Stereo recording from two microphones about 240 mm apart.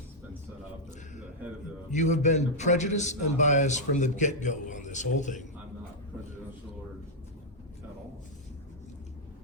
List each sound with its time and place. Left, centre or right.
1.9 s a man's voice: left